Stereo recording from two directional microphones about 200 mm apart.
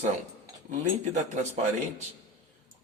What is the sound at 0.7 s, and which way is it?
Speech, 35° right (ahead or behind).